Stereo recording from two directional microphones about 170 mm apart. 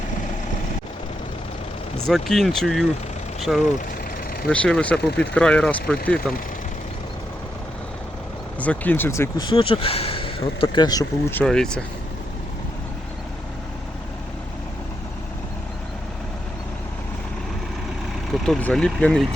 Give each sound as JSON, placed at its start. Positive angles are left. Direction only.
{"t": 2.0, "sound": "speech", "side_deg": 0}
{"t": 8.6, "sound": "speech", "side_deg": 10}
{"t": 9.5, "sound": "speech", "side_deg": 30}
{"t": 11.3, "sound": "speech", "side_deg": 5}
{"t": 18.3, "sound": "speech", "side_deg": 5}